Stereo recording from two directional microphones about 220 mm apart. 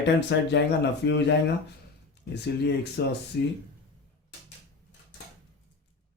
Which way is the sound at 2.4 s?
50° left (ahead or behind).